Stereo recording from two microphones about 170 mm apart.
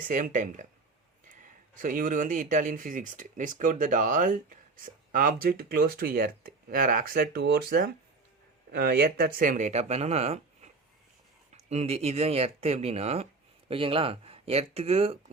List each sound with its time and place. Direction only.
0.1 s speech: 50° right (ahead or behind); by 15.2 s 35° right (ahead or behind)